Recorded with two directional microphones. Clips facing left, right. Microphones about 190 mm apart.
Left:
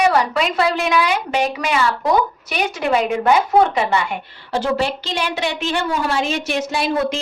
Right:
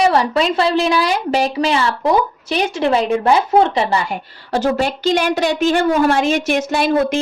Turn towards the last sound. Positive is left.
turn(degrees=-50)  # may be behind; listen again after turning